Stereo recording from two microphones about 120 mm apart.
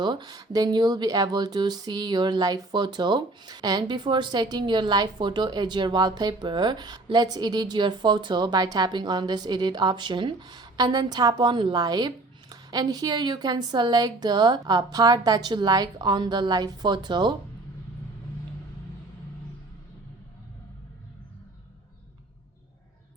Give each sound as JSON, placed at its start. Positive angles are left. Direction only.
{"t": 0.0, "sound": "speech", "side_deg": -35}